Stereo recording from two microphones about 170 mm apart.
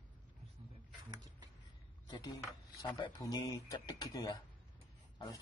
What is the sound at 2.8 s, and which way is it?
Speech, 30° left (ahead or behind).